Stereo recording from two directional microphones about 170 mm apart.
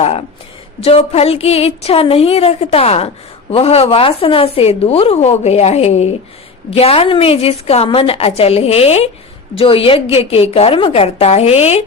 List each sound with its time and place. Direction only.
0.8 s a woman's voice: 35° left (ahead or behind)